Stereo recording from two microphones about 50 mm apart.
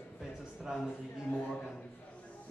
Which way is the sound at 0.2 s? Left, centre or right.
Centre.